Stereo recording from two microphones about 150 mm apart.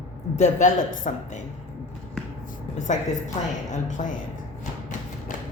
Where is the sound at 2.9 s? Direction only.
55° left (ahead or behind).